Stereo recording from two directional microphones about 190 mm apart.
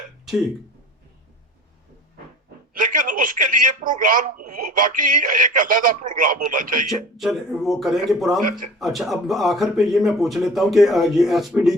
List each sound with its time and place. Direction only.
2.7 s speech: 45° right (ahead or behind)
6.8 s speech: centre (ahead or behind)